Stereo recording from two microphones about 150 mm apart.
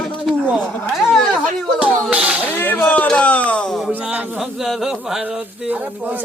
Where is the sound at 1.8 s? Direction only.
5° right (ahead or behind).